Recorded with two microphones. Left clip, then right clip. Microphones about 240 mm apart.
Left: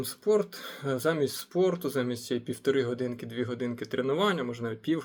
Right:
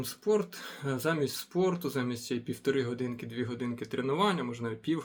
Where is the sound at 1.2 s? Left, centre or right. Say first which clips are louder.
Left 3 dB; right.